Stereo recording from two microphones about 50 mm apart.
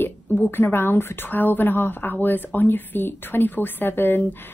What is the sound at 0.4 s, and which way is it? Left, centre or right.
Speech, left.